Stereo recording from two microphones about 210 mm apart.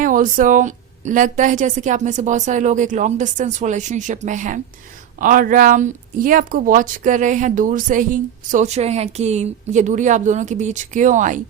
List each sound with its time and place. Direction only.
0.0 s speech: 40° right (ahead or behind)